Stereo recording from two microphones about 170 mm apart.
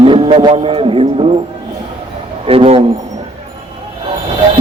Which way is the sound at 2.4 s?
35° right (ahead or behind).